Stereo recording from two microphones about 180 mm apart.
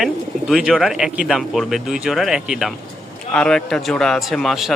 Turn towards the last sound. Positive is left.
turn(degrees=0)  # may be behind; listen again after turning